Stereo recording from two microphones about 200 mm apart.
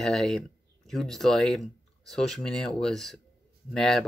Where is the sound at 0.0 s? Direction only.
Centre (ahead or behind).